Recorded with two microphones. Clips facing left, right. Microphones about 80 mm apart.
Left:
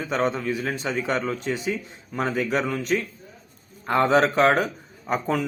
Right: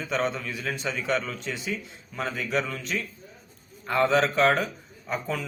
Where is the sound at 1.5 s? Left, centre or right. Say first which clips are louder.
Left 5 dB; left.